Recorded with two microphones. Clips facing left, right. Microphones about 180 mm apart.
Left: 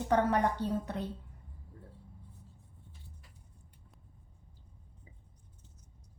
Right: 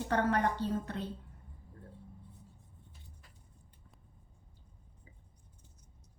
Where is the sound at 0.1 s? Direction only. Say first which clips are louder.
Left 3 dB; 15° left (ahead or behind).